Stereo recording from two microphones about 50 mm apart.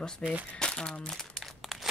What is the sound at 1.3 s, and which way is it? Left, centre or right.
Crumpling, centre.